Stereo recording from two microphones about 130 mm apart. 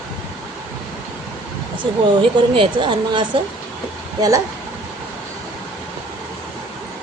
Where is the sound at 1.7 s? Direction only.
40° right (ahead or behind).